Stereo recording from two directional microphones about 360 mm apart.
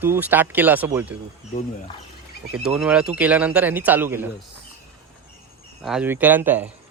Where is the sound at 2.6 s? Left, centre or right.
Centre.